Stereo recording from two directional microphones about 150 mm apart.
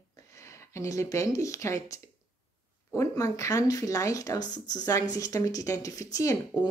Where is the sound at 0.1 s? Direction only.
20° left (ahead or behind).